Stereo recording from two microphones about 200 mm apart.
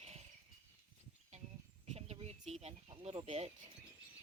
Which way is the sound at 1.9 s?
30° right (ahead or behind).